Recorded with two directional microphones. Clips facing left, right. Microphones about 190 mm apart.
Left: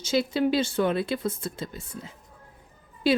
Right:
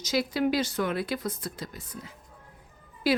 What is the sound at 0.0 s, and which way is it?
A woman's voice, 25° left (ahead or behind).